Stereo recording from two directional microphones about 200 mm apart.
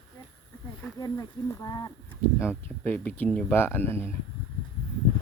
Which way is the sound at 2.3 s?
10° left (ahead or behind).